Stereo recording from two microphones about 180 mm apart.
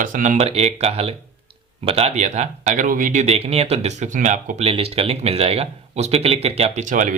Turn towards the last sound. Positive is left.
turn(degrees=-45)  # may be behind; listen again after turning